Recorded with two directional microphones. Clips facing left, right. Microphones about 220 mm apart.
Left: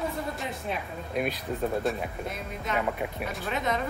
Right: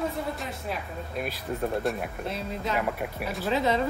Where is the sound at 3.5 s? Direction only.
30° right (ahead or behind).